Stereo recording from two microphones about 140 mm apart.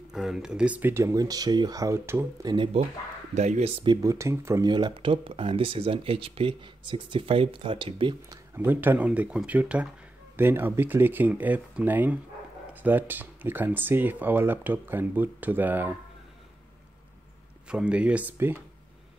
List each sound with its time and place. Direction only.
0.1 s speech: 5° right (ahead or behind); by 2.2 s 20° right (ahead or behind)
2.4 s speech: 30° right (ahead or behind)
3.3 s speech: 55° right (ahead or behind)
3.8 s speech: 30° right (ahead or behind)
4.1 s speech: 20° right (ahead or behind)
4.6 s speech: 30° right (ahead or behind)
8.5 s speech: 15° right (ahead or behind)
17.6 s speech: 5° right (ahead or behind)